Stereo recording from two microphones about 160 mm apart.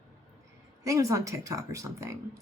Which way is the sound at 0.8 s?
20° right (ahead or behind).